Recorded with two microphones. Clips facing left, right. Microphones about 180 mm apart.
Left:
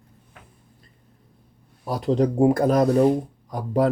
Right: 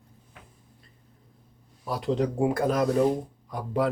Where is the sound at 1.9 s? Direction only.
40° left (ahead or behind).